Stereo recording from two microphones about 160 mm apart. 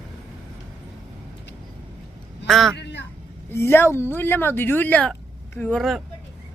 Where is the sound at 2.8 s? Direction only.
90° left.